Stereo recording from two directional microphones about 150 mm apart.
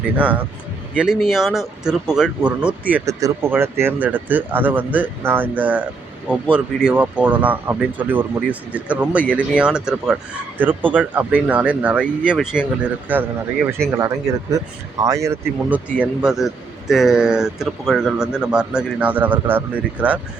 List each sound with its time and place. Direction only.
0.2 s speech: 10° right (ahead or behind)
13.9 s speech: 20° right (ahead or behind)
15.7 s speech: 10° right (ahead or behind)